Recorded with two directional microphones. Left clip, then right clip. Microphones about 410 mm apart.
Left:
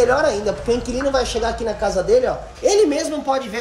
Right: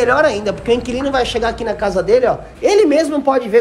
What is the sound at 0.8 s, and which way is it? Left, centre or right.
A woman's voice, right.